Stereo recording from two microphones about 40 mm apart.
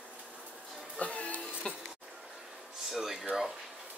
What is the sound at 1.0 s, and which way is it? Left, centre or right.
Music, left.